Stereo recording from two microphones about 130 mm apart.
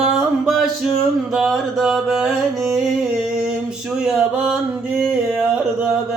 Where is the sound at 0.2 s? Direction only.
Centre (ahead or behind).